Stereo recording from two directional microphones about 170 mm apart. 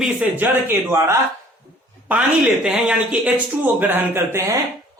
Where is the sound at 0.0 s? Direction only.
5° right (ahead or behind).